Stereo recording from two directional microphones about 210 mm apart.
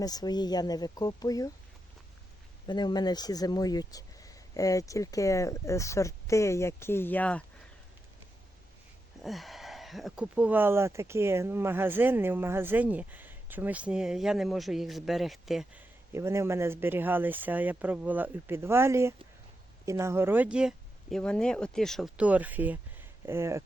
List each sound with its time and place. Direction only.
0.0 s speech: 20° left (ahead or behind)
2.6 s speech: 20° left (ahead or behind)
9.2 s speech: centre (ahead or behind)
16.1 s speech: 15° right (ahead or behind)